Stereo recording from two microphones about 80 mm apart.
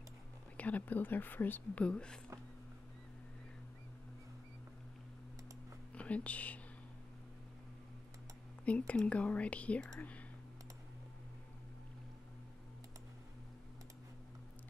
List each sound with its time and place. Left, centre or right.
0.6 s speech: centre
5.9 s speech: centre
8.6 s speech: centre